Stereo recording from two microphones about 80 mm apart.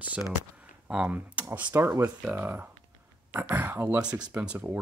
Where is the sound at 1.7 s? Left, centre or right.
Right.